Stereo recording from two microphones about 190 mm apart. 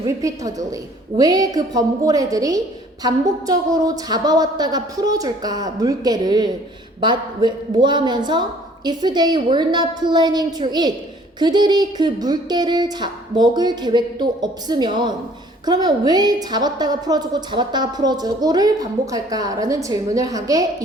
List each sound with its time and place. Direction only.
0.0 s a woman's voice: 20° right (ahead or behind)